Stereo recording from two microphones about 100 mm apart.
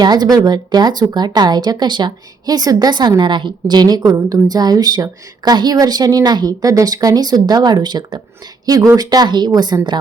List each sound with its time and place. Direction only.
0.0 s speech: 45° right (ahead or behind)